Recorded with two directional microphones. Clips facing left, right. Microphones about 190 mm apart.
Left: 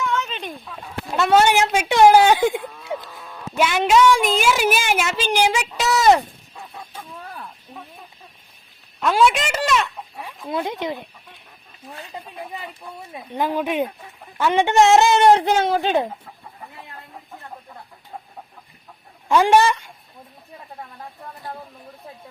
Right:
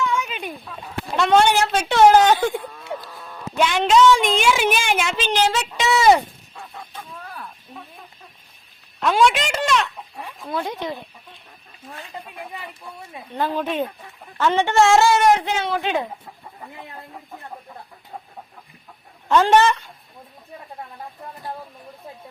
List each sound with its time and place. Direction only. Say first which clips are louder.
0.1 s a sound: even; 10° right (ahead or behind)
1.1 s a woman's voice: even; 5° left (ahead or behind)
2.6 s livestock: left 1 dB; centre (ahead or behind)
3.0 s speech: right 1 dB; centre (ahead or behind)
5.7 s speech: right 1 dB; centre (ahead or behind)
6.7 s chicken: even; 5° left (ahead or behind)
9.0 s speech: even; 5° left (ahead or behind)
10.5 s a woman's voice: left 2 dB; 20° left (ahead or behind)
12.1 s speech: even; 15° left (ahead or behind)
13.3 s a woman's voice: left 1 dB; 15° left (ahead or behind); by 16.0 s 35° left (ahead or behind)
19.3 s a woman's voice: even; 10° left (ahead or behind)